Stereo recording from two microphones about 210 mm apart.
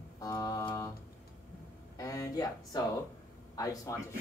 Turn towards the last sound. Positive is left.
turn(degrees=15)  # may be behind; listen again after turning